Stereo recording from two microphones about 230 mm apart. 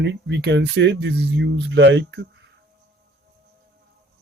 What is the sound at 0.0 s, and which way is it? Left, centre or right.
Speech, right.